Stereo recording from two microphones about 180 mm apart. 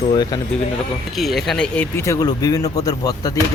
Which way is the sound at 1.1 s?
Centre (ahead or behind).